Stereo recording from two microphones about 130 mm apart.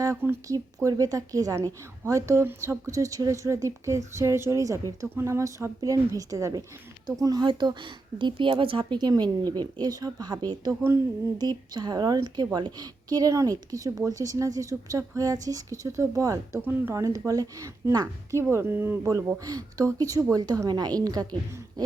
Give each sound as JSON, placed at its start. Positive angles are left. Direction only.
{"t": 0.0, "sound": "a woman's voice", "side_deg": -20}